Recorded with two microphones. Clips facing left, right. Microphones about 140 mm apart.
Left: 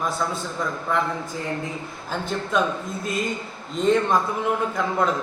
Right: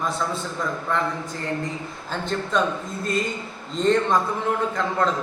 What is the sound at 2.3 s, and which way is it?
Speech, 5° left (ahead or behind).